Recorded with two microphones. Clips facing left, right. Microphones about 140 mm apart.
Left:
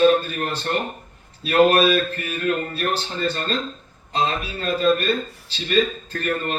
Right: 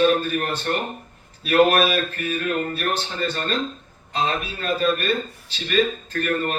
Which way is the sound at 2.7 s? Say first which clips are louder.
Left 1 dB; 35° left (ahead or behind).